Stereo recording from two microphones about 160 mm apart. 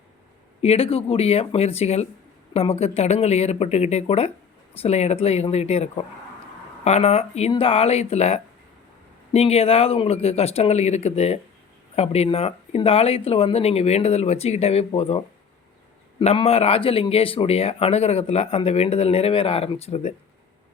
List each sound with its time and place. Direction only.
0.6 s speech: 40° left (ahead or behind)
16.2 s speech: 40° left (ahead or behind)